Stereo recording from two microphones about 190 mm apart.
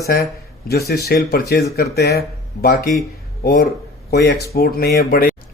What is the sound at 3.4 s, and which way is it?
Speech, 55° left (ahead or behind).